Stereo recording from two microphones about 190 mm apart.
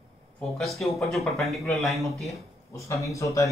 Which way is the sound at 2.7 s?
15° left (ahead or behind).